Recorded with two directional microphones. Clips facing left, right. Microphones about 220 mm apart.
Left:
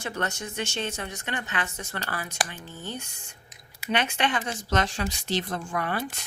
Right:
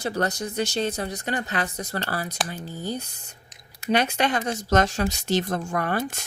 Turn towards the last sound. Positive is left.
turn(degrees=-45)  # may be behind; listen again after turning